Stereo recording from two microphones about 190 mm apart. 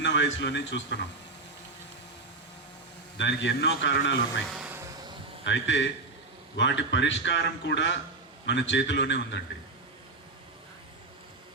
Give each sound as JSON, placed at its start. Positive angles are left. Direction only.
{"t": 0.0, "sound": "a man's voice", "side_deg": 65}
{"t": 3.2, "sound": "a man's voice", "side_deg": 65}
{"t": 4.4, "sound": "music", "side_deg": -5}
{"t": 5.5, "sound": "a man's voice", "side_deg": 75}